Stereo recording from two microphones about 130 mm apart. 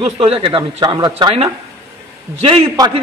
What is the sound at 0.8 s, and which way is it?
Speech, 35° right (ahead or behind).